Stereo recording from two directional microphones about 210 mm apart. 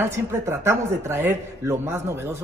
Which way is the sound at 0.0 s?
10° right (ahead or behind).